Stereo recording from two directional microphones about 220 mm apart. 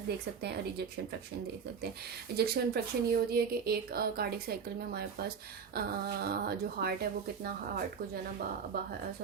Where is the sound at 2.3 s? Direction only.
45° right (ahead or behind).